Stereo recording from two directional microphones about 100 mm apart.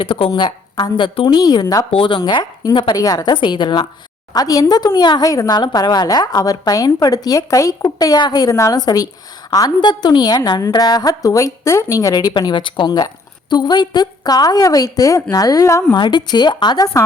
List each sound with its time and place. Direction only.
0.0 s a woman's voice: 60° left (ahead or behind)
1.6 s a woman's voice: 35° left (ahead or behind)
1.9 s a woman's voice: 60° left (ahead or behind)
4.4 s a woman's voice: 40° left (ahead or behind)
15.9 s a woman's voice: 50° left (ahead or behind)